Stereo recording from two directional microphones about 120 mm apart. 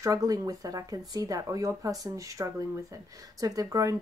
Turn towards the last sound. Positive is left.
turn(degrees=-30)  # may be behind; listen again after turning